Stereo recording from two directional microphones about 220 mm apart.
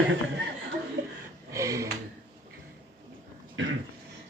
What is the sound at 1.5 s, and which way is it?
Speech, 15° right (ahead or behind).